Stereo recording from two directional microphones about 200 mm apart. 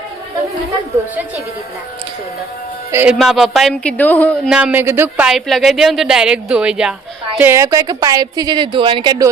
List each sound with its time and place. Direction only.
2.9 s speech: 5° right (ahead or behind); by 4.4 s 10° left (ahead or behind)
4.4 s a woman's voice: 5° right (ahead or behind); by 9.3 s 20° right (ahead or behind)